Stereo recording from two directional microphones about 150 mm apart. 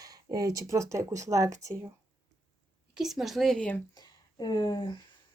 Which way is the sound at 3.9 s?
25° left (ahead or behind).